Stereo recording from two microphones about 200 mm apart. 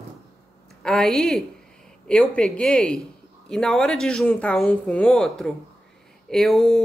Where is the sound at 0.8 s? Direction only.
Centre (ahead or behind).